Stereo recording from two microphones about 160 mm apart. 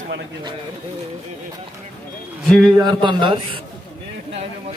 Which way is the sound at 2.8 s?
30° right (ahead or behind).